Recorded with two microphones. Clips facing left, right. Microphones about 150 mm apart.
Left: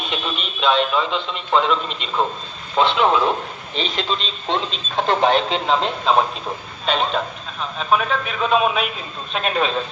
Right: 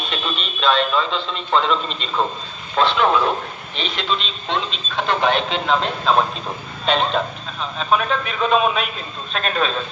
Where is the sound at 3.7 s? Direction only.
35° left (ahead or behind).